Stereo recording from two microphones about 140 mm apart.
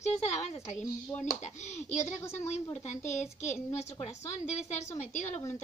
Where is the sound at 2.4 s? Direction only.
50° left (ahead or behind).